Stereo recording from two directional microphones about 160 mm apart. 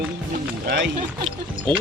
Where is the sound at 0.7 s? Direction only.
90° right.